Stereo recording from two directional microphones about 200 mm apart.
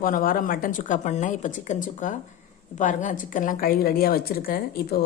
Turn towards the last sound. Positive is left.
turn(degrees=50)  # may be behind; listen again after turning